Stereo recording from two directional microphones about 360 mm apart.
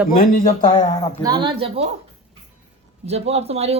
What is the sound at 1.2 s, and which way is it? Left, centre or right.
Speech, centre.